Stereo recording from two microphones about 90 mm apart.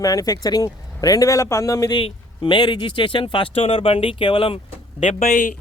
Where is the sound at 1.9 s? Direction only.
65° left (ahead or behind).